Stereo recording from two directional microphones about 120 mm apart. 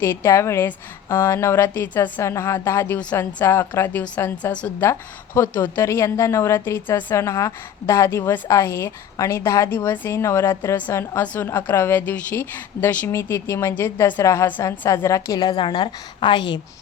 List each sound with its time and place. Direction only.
0.0 s a woman's voice: 20° left (ahead or behind); by 16.6 s 40° left (ahead or behind)